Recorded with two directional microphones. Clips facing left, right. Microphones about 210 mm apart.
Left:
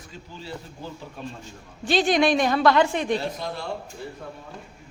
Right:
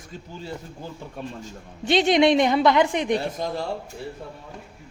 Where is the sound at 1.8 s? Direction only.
20° right (ahead or behind).